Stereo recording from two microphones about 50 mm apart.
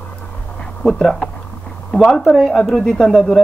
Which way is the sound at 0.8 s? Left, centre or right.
Centre.